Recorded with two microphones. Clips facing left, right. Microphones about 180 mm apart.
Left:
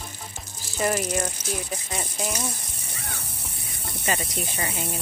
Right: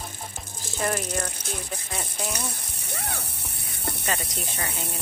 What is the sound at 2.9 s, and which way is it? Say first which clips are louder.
Music: right 6 dB; 65° right (ahead or behind).